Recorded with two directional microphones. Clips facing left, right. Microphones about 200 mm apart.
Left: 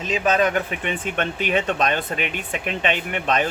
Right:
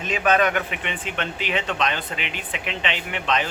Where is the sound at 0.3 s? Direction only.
40° left (ahead or behind).